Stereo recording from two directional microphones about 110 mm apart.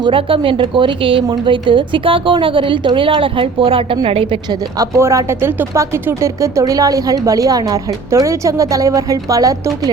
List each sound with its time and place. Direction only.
0.0 s a woman's voice: 55° right (ahead or behind)
4.8 s speech: 25° right (ahead or behind)